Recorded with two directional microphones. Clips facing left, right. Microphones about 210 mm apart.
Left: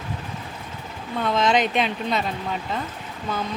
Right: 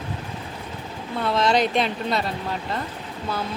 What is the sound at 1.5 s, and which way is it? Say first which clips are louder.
Speech: right 1 dB; 35° right (ahead or behind).